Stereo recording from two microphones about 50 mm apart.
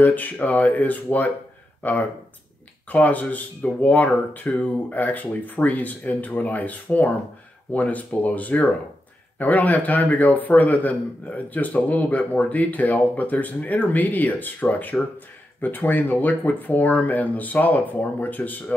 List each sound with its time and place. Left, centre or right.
0.0 s speech: left